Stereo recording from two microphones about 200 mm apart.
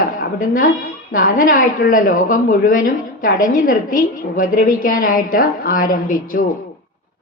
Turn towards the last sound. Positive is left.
turn(degrees=45)  # may be behind; listen again after turning